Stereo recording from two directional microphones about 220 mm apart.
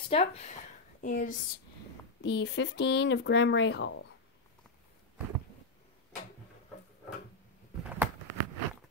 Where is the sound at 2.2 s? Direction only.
50° left (ahead or behind).